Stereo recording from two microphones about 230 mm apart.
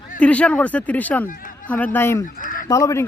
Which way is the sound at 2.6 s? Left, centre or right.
Centre.